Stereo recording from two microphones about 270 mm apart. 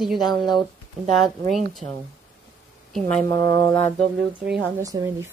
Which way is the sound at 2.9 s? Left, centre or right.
Centre.